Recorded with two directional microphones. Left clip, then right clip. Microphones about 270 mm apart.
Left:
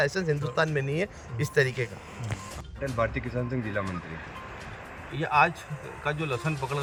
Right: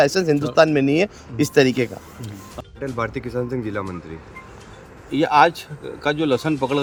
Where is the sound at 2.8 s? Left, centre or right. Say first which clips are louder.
Right 3 dB; centre.